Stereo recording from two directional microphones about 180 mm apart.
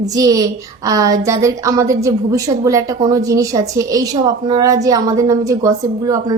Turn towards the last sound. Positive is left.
turn(degrees=-20)  # may be behind; listen again after turning